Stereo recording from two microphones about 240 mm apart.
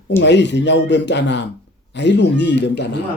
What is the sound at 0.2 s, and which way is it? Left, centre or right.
A man's voice, left.